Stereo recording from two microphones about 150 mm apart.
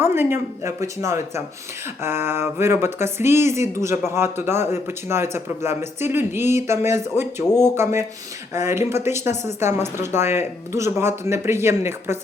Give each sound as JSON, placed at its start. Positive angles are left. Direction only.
{"t": 0.0, "sound": "speech", "side_deg": -15}